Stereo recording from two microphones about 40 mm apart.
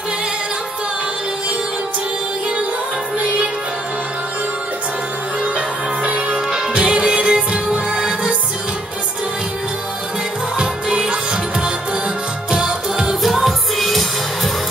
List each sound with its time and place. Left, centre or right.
6.0 s music: right
10.6 s music: right
12.4 s music: centre
13.2 s music: centre